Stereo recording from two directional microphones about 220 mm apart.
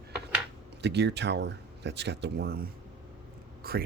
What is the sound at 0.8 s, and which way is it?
Speech, 50° right (ahead or behind).